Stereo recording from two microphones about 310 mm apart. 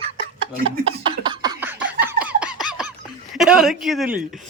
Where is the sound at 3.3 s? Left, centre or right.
Centre.